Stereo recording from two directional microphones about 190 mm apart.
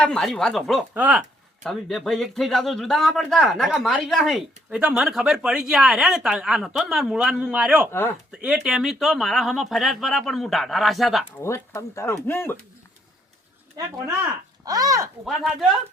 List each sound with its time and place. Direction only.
0.0 s speech: 5° left (ahead or behind)
11.4 s speech: 15° left (ahead or behind)
13.7 s speech: 20° right (ahead or behind)